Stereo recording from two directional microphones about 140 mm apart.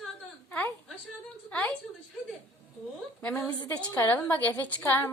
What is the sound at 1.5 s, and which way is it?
Speech, 10° left (ahead or behind).